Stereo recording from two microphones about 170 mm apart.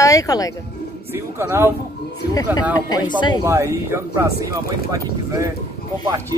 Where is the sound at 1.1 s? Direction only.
15° right (ahead or behind).